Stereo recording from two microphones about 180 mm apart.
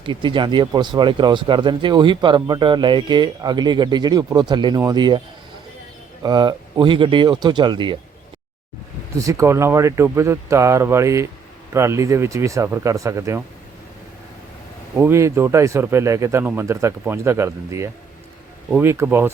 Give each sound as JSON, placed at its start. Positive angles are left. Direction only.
{"t": 0.0, "sound": "speech", "side_deg": -25}
{"t": 6.2, "sound": "speech", "side_deg": -25}
{"t": 9.1, "sound": "speech", "side_deg": -15}
{"t": 14.9, "sound": "speech", "side_deg": -15}